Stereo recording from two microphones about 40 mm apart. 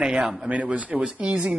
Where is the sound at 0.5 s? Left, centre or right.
Right.